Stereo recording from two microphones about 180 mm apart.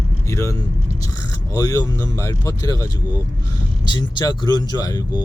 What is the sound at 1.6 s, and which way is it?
Speech, 15° left (ahead or behind).